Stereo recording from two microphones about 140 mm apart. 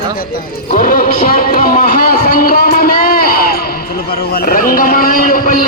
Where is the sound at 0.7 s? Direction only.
80° left.